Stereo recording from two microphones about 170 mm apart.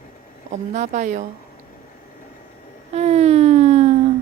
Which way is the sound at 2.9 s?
40° right (ahead or behind).